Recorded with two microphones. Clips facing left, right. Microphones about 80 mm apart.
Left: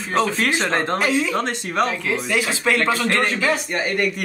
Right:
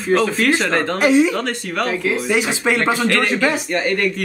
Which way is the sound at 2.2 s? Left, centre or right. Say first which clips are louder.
Right 1 dB; centre.